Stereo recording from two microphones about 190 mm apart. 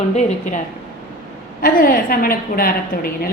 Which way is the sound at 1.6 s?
50° left (ahead or behind).